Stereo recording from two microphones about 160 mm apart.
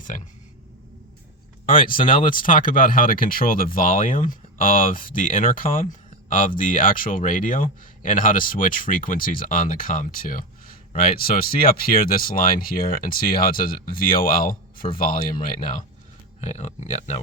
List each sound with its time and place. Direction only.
1.6 s speech: 60° left (ahead or behind)
16.4 s speech: 45° left (ahead or behind)